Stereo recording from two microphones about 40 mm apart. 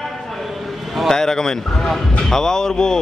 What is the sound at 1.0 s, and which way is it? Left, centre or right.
Speech, centre.